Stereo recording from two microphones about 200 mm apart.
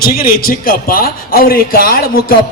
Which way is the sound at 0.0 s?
50° left (ahead or behind).